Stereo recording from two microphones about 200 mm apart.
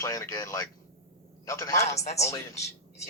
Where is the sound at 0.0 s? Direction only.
15° left (ahead or behind).